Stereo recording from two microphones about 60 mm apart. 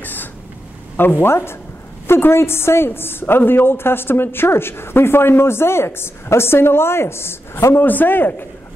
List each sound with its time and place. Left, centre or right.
0.0 s a sound: left
0.9 s a woman's voice: left
7.7 s a woman's voice: left